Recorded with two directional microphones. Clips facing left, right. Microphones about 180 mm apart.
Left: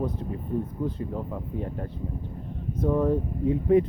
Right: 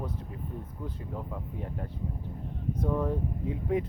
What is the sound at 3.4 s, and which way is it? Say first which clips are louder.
Speech: left 10 dB; 10° right (ahead or behind).